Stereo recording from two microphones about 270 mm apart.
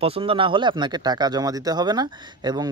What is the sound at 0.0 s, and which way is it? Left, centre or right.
Speech, right.